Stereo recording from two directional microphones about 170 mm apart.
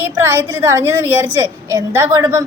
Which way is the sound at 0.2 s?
15° right (ahead or behind).